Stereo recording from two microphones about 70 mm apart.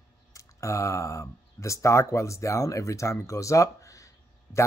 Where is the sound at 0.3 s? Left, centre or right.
Left.